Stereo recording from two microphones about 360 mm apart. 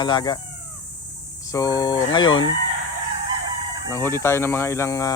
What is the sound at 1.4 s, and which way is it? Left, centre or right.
Speech, centre.